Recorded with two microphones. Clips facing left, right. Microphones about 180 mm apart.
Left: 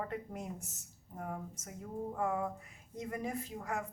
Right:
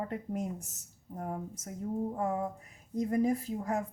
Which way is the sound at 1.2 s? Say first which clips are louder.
Right 4 dB; 40° right (ahead or behind).